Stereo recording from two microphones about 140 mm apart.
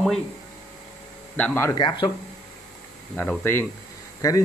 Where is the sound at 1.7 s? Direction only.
30° left (ahead or behind).